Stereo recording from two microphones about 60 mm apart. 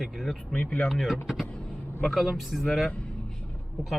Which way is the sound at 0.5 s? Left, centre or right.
Left.